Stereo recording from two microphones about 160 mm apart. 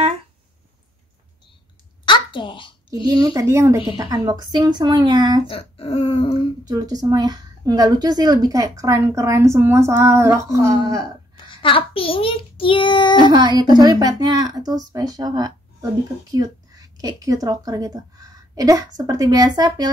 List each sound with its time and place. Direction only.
2.0 s a sound: 30° left (ahead or behind)
3.1 s speech: 25° right (ahead or behind)
5.5 s speech: 35° left (ahead or behind)
6.6 s speech: 25° right (ahead or behind)
11.3 s a child's voice: 30° left (ahead or behind)
13.3 s speech: 25° right (ahead or behind)